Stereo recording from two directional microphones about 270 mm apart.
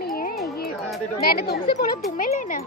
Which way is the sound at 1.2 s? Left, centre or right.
Left.